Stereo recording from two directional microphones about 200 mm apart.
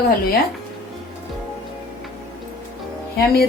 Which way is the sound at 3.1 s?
50° left (ahead or behind).